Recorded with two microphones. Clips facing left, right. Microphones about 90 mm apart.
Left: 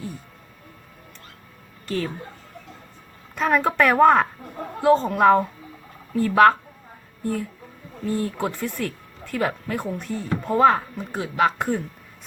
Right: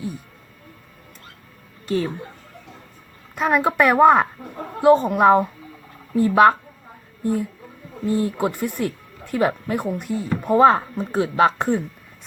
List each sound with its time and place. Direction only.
1.9 s speech: 20° right (ahead or behind)
3.3 s speech: 10° right (ahead or behind)
8.0 s speech: 20° right (ahead or behind)
10.9 s speech: 35° right (ahead or behind)